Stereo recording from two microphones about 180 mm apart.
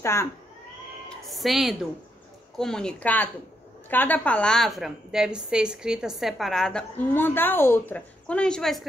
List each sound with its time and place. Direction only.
0.0 s speech: 15° left (ahead or behind)
1.0 s a woman's voice: centre (ahead or behind)